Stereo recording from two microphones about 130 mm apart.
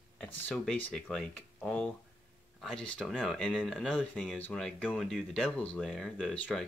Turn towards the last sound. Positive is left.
turn(degrees=0)  # may be behind; listen again after turning